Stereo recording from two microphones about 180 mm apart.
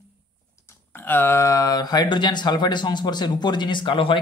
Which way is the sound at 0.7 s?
10° left (ahead or behind).